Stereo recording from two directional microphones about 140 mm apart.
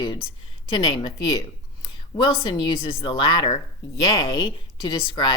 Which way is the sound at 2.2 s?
30° left (ahead or behind).